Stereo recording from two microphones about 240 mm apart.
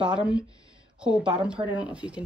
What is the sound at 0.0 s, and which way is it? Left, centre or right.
A woman's voice, centre.